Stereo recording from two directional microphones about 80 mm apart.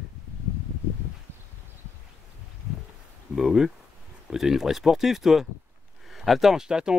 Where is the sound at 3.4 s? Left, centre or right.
Centre.